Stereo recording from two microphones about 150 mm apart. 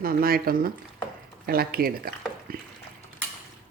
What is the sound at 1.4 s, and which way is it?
Speech, 90° right.